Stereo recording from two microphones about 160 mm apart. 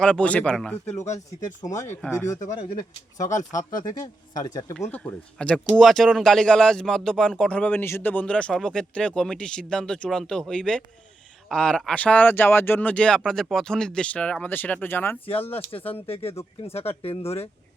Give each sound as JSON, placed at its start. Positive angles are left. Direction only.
{"t": 0.0, "sound": "speech", "side_deg": 5}
{"t": 1.0, "sound": "speech", "side_deg": 50}
{"t": 2.0, "sound": "speech", "side_deg": 15}
{"t": 4.0, "sound": "speech", "side_deg": 25}
{"t": 4.8, "sound": "speech", "side_deg": 10}
{"t": 15.3, "sound": "speech", "side_deg": 35}